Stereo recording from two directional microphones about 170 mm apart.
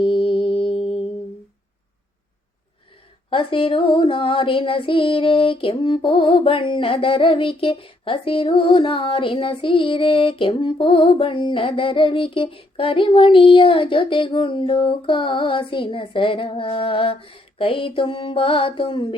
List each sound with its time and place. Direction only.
0.0 s music: 30° left (ahead or behind)
3.2 s child singing: 30° left (ahead or behind)